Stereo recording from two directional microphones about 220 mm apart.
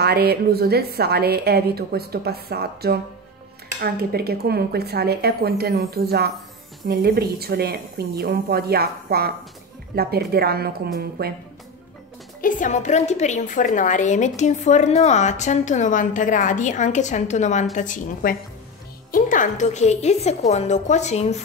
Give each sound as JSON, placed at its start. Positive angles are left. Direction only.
{"t": 0.0, "sound": "a woman's voice", "side_deg": -45}
{"t": 12.4, "sound": "a woman's voice", "side_deg": 35}